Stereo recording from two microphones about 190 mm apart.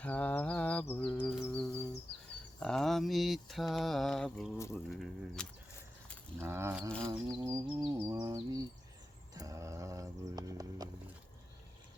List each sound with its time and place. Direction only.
0.0 s mantra: 10° left (ahead or behind)
1.4 s insect: 5° left (ahead or behind)
2.6 s mantra: 5° left (ahead or behind)
4.7 s a sound: centre (ahead or behind)
6.4 s a sound: 15° right (ahead or behind)
6.8 s insect: 5° left (ahead or behind)
7.3 s mantra: 20° right (ahead or behind)
9.3 s horse: 20° right (ahead or behind)